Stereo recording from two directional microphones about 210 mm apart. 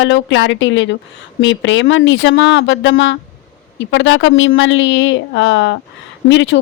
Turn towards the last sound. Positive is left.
turn(degrees=60)  # may be behind; listen again after turning